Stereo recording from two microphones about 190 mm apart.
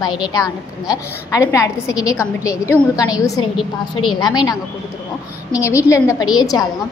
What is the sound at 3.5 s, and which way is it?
Speech, centre (ahead or behind).